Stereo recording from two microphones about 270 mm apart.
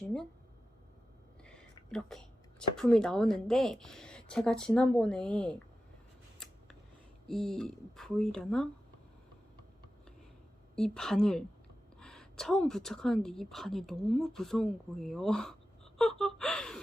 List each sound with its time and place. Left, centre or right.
1.9 s a woman's voice: centre
6.4 s scissors: centre
7.3 s a woman's voice: centre
10.8 s a woman's voice: centre